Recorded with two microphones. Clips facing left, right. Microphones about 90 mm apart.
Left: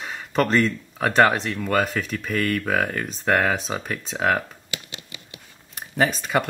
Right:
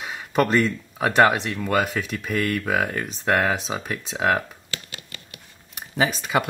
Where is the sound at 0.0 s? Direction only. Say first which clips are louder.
Right 1 dB; 5° right (ahead or behind).